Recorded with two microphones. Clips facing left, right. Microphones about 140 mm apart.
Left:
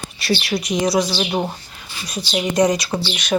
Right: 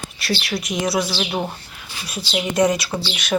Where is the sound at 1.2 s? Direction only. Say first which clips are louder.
Left 3 dB; 15° left (ahead or behind).